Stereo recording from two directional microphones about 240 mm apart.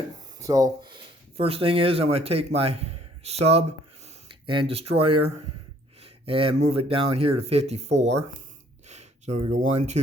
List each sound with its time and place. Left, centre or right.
0.3 s speech: centre
7.9 s speech: right
8.9 s speech: right